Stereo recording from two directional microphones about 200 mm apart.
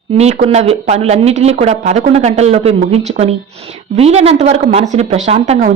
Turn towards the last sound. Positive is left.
turn(degrees=-30)  # may be behind; listen again after turning